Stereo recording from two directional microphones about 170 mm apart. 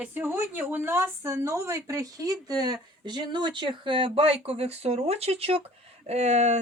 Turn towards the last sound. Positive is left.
turn(degrees=-40)  # may be behind; listen again after turning